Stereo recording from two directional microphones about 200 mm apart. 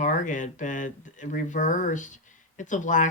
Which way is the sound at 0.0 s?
40° left (ahead or behind).